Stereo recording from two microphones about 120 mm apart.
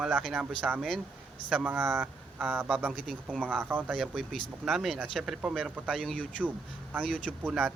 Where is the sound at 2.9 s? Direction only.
5° left (ahead or behind).